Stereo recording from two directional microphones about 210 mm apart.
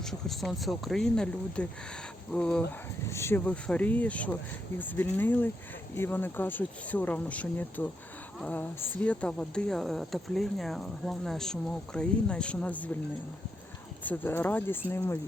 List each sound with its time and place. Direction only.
0.0 s a woman's voice: centre (ahead or behind)
14.0 s speech: 10° left (ahead or behind)